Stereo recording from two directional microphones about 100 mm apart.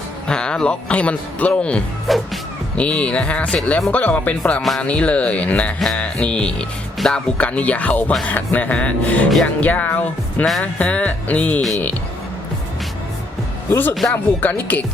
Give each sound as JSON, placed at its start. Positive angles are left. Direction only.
{"t": 0.3, "sound": "speech", "side_deg": 10}
{"t": 2.0, "sound": "music", "side_deg": 0}
{"t": 2.7, "sound": "speech", "side_deg": 10}
{"t": 4.6, "sound": "speech", "side_deg": 0}
{"t": 4.9, "sound": "speech", "side_deg": 10}
{"t": 13.7, "sound": "speech", "side_deg": 20}